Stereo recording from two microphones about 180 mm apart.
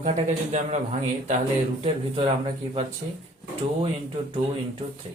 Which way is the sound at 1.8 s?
30° right (ahead or behind).